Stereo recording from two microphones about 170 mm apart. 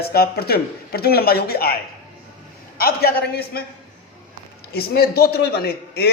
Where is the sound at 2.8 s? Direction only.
65° left (ahead or behind).